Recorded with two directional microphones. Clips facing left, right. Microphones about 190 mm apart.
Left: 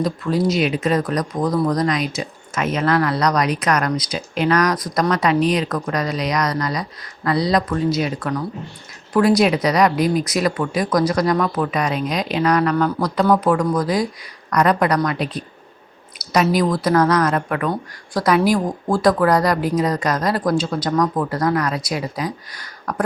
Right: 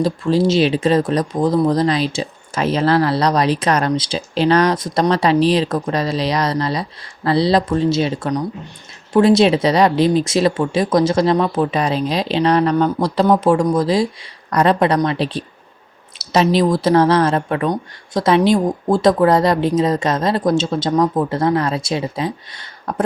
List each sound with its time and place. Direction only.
0.0 s speech: 30° right (ahead or behind)